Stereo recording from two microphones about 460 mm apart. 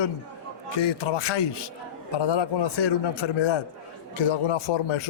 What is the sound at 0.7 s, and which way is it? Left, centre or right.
A man's voice, left.